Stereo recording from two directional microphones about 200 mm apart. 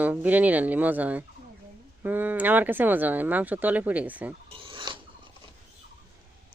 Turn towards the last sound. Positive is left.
turn(degrees=-25)  # may be behind; listen again after turning